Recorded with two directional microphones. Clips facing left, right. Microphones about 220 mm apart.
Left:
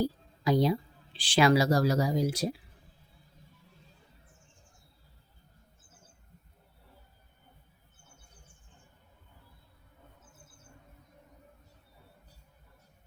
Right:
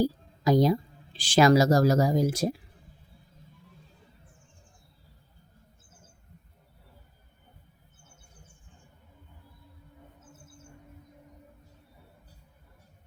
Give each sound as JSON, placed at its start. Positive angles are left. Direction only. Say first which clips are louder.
{"t": 0.0, "sound": "speech", "louder": "right 4 dB", "side_deg": -40}